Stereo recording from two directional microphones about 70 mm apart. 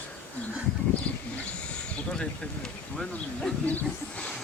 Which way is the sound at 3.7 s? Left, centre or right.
Left.